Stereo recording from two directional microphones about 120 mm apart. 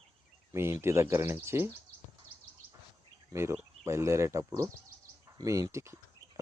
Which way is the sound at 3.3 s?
20° right (ahead or behind).